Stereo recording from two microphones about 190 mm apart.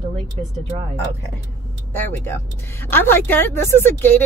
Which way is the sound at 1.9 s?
10° left (ahead or behind).